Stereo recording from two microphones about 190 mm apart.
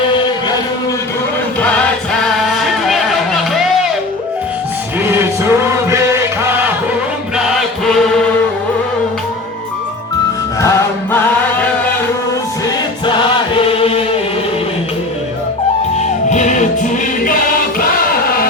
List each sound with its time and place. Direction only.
2.2 s music: centre (ahead or behind)
5.0 s music: 10° right (ahead or behind)
7.9 s chant: centre (ahead or behind)
10.6 s music: 15° left (ahead or behind)
12.6 s choir: 25° left (ahead or behind)
13.7 s chant: 30° left (ahead or behind)
16.0 s music: 40° left (ahead or behind)